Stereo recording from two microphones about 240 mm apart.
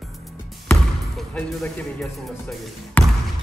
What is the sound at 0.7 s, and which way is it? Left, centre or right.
Speech, centre.